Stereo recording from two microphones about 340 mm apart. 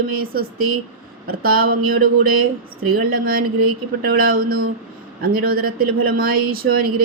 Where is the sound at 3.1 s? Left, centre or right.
Right.